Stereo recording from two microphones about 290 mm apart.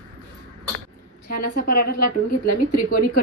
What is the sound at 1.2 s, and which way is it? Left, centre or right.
A woman's voice, left.